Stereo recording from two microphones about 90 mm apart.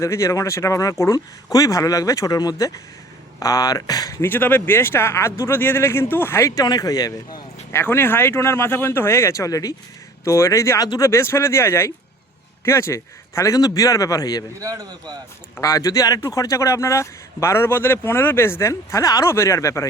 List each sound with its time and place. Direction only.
0.0 s speech: 35° left (ahead or behind)
4.2 s speech: 20° left (ahead or behind)
6.5 s speech: 45° left (ahead or behind)
7.7 s speech: 25° left (ahead or behind); by 14.4 s 40° left (ahead or behind)
14.6 s speech: 40° right (ahead or behind)
15.6 s speech: 40° left (ahead or behind)